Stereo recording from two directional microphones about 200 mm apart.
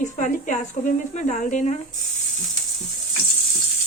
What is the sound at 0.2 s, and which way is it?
Speech, 40° left (ahead or behind).